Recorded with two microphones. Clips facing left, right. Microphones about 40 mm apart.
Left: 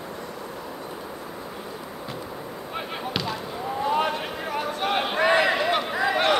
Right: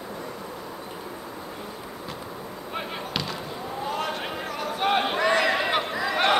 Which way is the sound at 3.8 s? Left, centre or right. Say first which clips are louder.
Left 5 dB; centre.